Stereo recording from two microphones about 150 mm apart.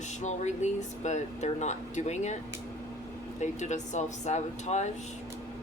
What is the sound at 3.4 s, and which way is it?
Speech, 50° left (ahead or behind).